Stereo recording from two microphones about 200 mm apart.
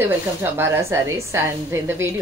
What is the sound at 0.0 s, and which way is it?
A woman's voice, 10° right (ahead or behind).